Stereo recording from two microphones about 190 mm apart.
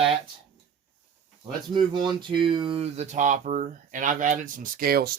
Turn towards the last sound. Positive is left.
turn(degrees=-55)  # may be behind; listen again after turning